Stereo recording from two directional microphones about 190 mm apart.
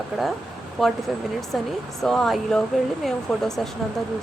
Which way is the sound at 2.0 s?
Centre (ahead or behind).